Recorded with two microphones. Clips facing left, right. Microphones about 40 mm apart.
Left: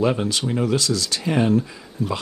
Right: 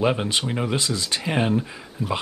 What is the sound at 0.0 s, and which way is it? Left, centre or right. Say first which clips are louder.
Speech: left 1 dB; right.